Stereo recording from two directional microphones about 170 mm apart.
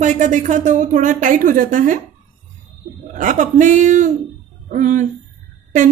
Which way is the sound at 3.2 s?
50° right (ahead or behind).